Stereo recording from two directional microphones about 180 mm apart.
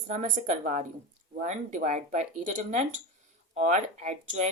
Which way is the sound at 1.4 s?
45° right (ahead or behind).